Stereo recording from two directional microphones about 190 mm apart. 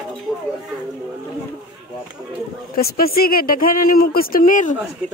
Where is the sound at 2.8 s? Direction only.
55° left (ahead or behind).